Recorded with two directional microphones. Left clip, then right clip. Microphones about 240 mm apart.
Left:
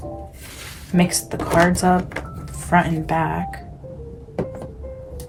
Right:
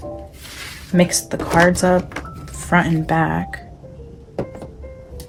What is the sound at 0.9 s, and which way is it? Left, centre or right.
Speech, right.